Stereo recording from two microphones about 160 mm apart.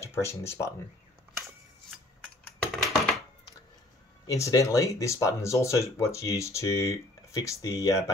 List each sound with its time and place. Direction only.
0.0 s speech: 15° left (ahead or behind)
2.6 s typing: centre (ahead or behind)
4.3 s speech: 20° left (ahead or behind)